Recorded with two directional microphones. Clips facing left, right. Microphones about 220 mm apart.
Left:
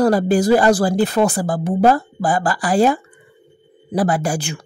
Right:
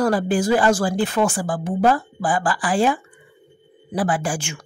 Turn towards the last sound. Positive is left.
turn(degrees=35)  # may be behind; listen again after turning